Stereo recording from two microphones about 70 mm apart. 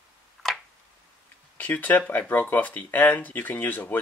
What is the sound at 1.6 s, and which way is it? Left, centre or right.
Speech, left.